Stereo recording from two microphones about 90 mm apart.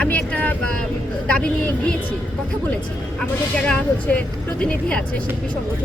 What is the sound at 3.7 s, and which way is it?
Speech, 15° left (ahead or behind).